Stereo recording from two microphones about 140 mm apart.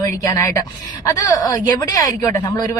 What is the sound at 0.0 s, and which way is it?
Speech, 25° left (ahead or behind).